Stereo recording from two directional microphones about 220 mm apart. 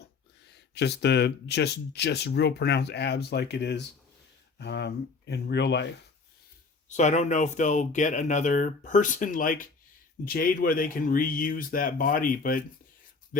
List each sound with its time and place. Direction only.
0.5 s speech: 50° left (ahead or behind)
6.8 s speech: 30° left (ahead or behind)